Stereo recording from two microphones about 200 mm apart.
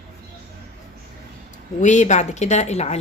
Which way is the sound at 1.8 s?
35° left (ahead or behind).